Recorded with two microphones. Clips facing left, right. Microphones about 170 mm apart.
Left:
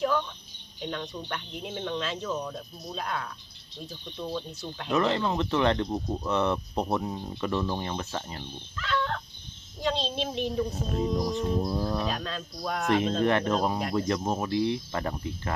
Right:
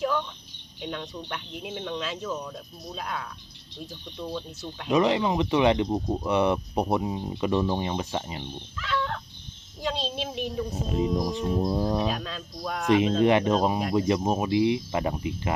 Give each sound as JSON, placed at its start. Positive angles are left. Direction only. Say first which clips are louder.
{"t": 0.8, "sound": "speech", "louder": "even", "side_deg": -5}
{"t": 4.9, "sound": "speech", "louder": "right 3 dB", "side_deg": -15}
{"t": 12.0, "sound": "speech", "louder": "right 2 dB", "side_deg": -5}
{"t": 12.9, "sound": "speech", "louder": "right 4 dB", "side_deg": -10}